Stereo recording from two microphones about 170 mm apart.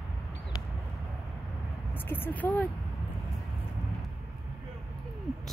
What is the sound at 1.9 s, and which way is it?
Speech, 10° left (ahead or behind).